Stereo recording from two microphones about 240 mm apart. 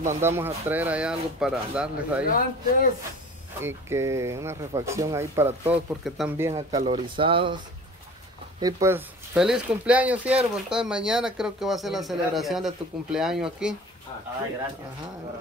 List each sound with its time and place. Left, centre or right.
0.2 s speech: centre
2.2 s speech: left
3.6 s speech: centre
6.9 s speech: right
8.5 s speech: centre